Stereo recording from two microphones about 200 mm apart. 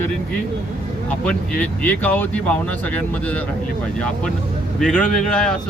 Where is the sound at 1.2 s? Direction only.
5° left (ahead or behind).